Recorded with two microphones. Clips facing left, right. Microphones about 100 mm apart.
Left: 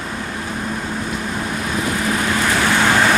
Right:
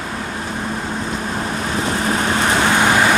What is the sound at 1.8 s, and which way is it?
Vehicle, 30° right (ahead or behind).